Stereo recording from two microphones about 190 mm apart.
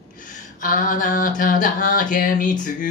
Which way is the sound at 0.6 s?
45° left (ahead or behind).